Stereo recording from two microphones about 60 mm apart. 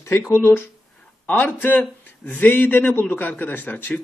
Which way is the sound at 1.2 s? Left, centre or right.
Left.